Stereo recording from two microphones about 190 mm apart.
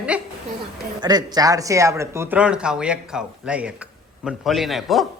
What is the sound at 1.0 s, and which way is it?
Speech, 20° right (ahead or behind).